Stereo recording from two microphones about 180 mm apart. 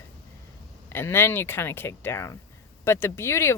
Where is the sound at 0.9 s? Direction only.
15° left (ahead or behind).